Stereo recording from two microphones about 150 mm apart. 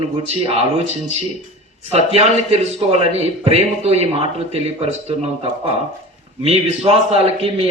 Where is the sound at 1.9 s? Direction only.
45° right (ahead or behind).